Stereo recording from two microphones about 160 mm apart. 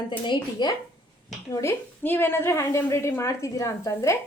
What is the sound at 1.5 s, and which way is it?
A woman's voice, 15° left (ahead or behind).